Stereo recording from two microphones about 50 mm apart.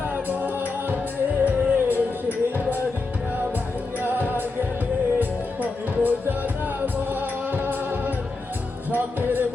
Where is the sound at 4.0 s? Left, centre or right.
Right.